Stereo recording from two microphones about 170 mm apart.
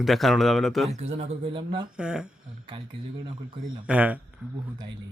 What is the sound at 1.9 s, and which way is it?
Speech, 5° right (ahead or behind).